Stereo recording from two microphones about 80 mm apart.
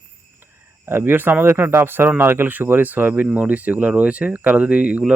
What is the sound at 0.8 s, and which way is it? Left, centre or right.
Speech, right.